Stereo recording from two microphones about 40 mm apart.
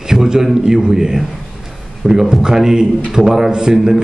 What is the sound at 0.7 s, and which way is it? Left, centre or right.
A man's voice, centre.